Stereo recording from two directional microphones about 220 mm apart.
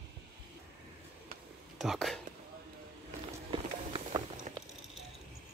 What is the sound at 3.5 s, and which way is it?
Run, 20° right (ahead or behind).